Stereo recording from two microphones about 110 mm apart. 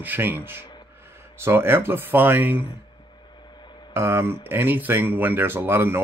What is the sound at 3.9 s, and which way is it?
Speech, 20° right (ahead or behind).